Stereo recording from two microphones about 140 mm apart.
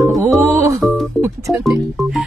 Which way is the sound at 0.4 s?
20° right (ahead or behind).